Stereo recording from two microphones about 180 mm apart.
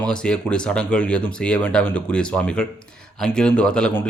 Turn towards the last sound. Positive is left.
turn(degrees=5)  # may be behind; listen again after turning